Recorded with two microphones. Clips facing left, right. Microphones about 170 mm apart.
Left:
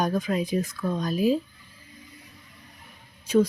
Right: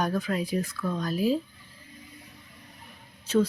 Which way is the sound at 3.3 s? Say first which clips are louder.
Left 3 dB; 10° left (ahead or behind).